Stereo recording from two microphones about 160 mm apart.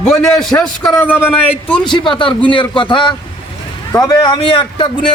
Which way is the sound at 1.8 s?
30° left (ahead or behind).